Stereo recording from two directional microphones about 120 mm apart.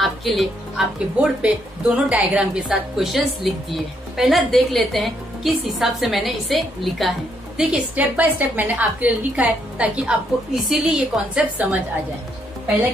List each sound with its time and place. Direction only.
0.0 s a woman's voice: centre (ahead or behind)